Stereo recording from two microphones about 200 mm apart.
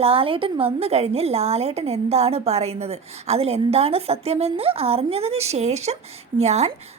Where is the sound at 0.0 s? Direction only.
30° right (ahead or behind).